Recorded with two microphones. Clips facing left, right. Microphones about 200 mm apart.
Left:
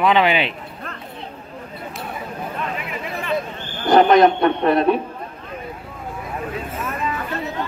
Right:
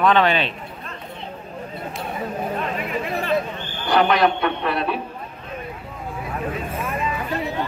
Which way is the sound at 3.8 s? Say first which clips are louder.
Left 5 dB; 45° left (ahead or behind).